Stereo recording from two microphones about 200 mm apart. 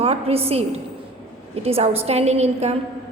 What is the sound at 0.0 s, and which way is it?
A woman's voice, 30° right (ahead or behind).